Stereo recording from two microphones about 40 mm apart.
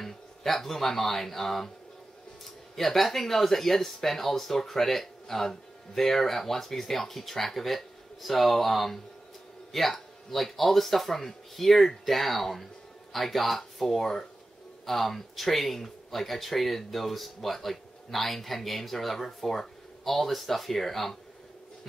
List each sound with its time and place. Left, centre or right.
0.0 s speech: centre